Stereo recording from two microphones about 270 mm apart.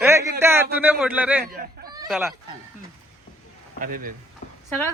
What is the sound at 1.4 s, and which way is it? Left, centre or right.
Chicken, right.